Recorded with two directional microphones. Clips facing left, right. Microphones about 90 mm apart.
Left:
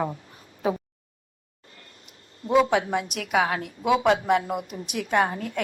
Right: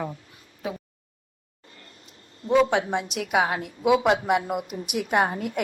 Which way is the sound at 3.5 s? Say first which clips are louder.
Right 2 dB; 20° right (ahead or behind).